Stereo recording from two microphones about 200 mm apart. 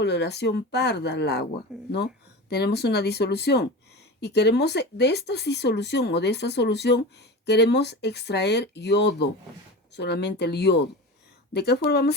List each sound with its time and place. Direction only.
0.0 s speech: 55° left (ahead or behind)